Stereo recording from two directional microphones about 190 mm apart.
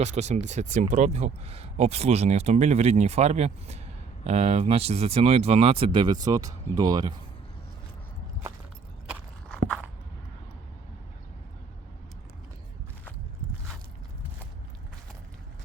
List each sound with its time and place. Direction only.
0.0 s speech: 35° right (ahead or behind); by 7.1 s 20° right (ahead or behind)